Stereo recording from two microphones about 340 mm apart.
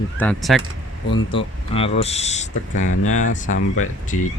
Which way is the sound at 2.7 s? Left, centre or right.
Left.